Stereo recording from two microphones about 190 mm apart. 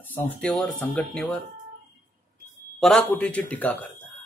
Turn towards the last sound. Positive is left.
turn(degrees=10)  # may be behind; listen again after turning